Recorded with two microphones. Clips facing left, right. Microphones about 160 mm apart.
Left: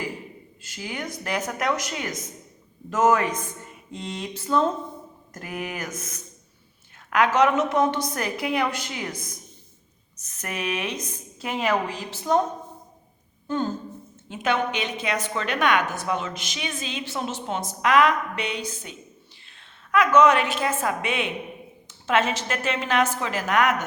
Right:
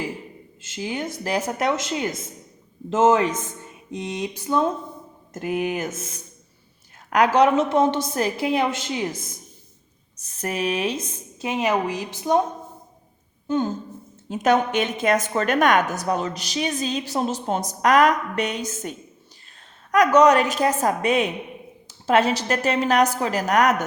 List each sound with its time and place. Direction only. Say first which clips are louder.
0.6 s a woman's voice: right 5 dB; 20° right (ahead or behind)
5.3 s a woman's voice: right 8 dB; 25° right (ahead or behind)
11.3 s a woman's voice: right 2 dB; 20° right (ahead or behind)
13.5 s a woman's voice: right 3 dB; 20° right (ahead or behind)
14.3 s a woman's voice: right 5 dB; 40° right (ahead or behind)